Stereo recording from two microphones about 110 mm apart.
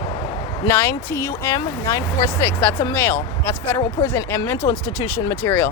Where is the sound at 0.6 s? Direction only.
20° left (ahead or behind).